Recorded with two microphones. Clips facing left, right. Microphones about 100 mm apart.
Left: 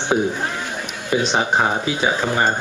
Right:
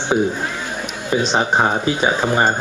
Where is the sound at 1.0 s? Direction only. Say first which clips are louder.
Right 1 dB; 20° right (ahead or behind).